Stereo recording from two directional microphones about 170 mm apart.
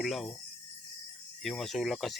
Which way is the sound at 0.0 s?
Centre (ahead or behind).